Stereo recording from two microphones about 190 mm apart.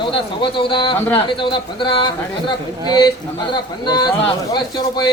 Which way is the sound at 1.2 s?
25° left (ahead or behind).